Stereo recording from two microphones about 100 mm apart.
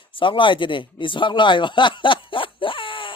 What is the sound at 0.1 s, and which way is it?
Speech, 55° left (ahead or behind).